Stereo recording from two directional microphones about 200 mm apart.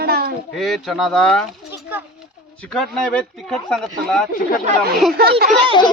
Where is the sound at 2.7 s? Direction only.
Centre (ahead or behind).